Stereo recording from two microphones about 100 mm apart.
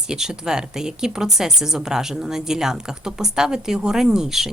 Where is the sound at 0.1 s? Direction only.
5° right (ahead or behind).